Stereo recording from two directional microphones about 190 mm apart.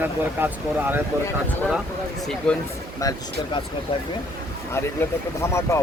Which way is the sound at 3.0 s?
15° left (ahead or behind).